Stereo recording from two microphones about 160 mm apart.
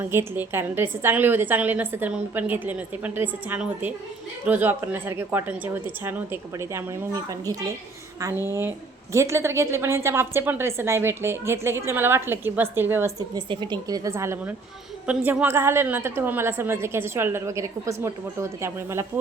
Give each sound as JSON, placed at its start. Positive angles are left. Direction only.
{"t": 0.0, "sound": "a woman's voice", "side_deg": -15}